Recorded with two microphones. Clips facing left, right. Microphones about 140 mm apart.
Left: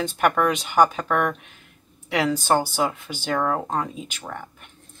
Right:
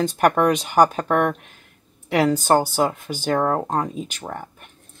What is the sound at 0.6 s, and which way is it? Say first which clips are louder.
Speech: right 2 dB; 40° right (ahead or behind).